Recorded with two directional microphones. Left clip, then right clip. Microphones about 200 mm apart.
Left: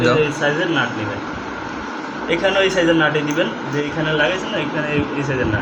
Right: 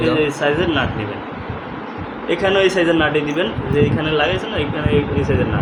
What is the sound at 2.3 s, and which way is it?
A man's voice, 55° right (ahead or behind).